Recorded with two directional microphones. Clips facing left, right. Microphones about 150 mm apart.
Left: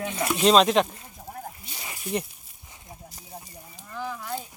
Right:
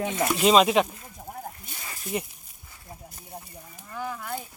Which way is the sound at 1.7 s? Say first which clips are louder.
Left 1 dB; 20° left (ahead or behind).